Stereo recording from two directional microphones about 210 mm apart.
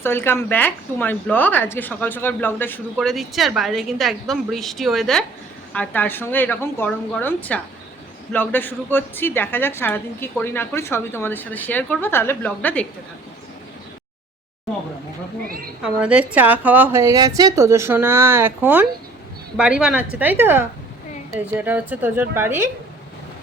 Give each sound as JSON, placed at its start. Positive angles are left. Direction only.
{"t": 0.0, "sound": "a woman's voice", "side_deg": 10}
{"t": 15.4, "sound": "a sound", "side_deg": -45}
{"t": 15.8, "sound": "a woman's voice", "side_deg": -5}